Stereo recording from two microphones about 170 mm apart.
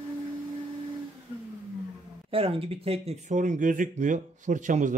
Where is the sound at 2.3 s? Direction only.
35° right (ahead or behind).